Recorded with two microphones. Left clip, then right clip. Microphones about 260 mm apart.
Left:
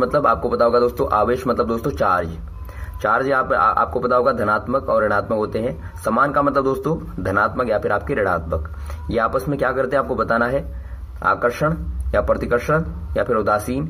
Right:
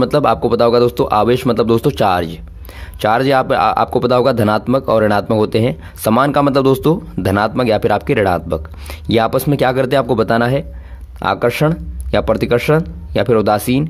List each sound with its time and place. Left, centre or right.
0.0 s speech: right